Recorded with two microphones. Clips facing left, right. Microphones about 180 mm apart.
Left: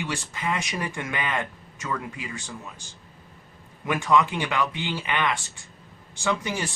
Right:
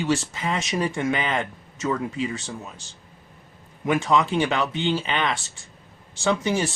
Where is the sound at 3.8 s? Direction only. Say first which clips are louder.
Right 1 dB; 25° right (ahead or behind).